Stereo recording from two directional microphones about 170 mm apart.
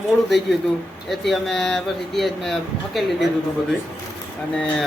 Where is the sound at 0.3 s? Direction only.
Centre (ahead or behind).